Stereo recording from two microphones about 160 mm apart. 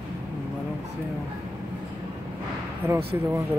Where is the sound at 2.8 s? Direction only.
15° right (ahead or behind).